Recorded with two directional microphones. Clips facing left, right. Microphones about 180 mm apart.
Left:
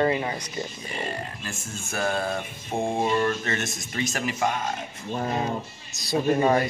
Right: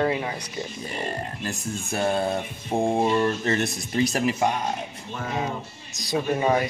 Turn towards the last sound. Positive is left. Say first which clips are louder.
# left 2 dB
turn(degrees=-15)  # may be behind; listen again after turning